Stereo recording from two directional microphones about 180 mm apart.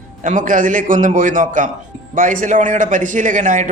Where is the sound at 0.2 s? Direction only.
45° right (ahead or behind).